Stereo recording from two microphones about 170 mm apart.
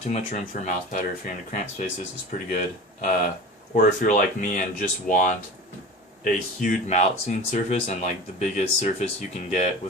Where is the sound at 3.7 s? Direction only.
50° left (ahead or behind).